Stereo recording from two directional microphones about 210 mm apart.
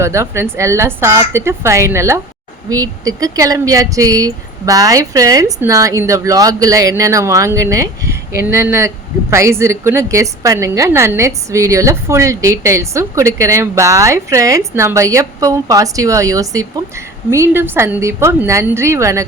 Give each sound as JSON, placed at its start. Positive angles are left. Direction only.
{"t": 0.0, "sound": "a woman's voice", "side_deg": -15}